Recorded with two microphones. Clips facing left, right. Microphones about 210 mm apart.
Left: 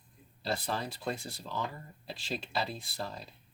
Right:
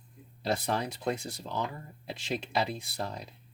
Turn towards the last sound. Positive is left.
turn(degrees=-20)  # may be behind; listen again after turning